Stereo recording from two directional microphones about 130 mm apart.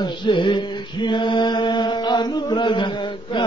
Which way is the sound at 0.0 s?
35° left (ahead or behind).